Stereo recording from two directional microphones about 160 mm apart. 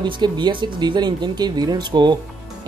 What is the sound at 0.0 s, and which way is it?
Speech, 30° right (ahead or behind).